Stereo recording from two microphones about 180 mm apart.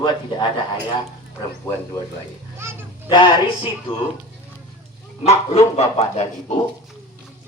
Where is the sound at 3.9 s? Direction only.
30° left (ahead or behind).